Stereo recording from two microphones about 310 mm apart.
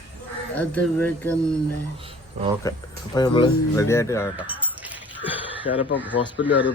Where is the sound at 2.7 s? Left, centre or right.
Centre.